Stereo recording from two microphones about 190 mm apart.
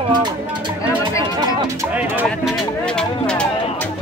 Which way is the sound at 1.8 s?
10° right (ahead or behind).